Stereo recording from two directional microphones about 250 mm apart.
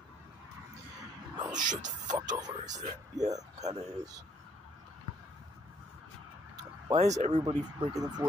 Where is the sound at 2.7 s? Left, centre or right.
Right.